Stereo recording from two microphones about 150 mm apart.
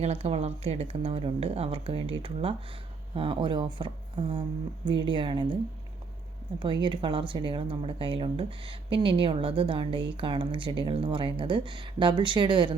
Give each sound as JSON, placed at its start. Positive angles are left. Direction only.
{"t": 0.0, "sound": "speech", "side_deg": -45}
{"t": 6.6, "sound": "speech", "side_deg": -35}